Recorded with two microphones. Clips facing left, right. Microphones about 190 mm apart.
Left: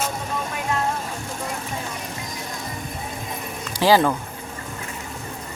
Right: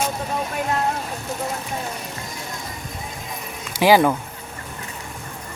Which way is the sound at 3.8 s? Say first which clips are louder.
Right 2 dB; 15° right (ahead or behind).